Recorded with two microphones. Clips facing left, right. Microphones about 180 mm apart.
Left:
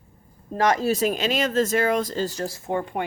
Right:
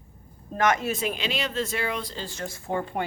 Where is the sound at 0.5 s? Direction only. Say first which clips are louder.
Left 3 dB; 35° left (ahead or behind).